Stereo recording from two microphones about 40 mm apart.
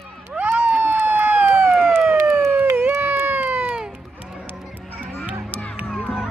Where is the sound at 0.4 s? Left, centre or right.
Right.